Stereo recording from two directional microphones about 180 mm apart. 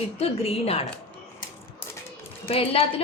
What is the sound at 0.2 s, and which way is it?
Speech, 35° left (ahead or behind).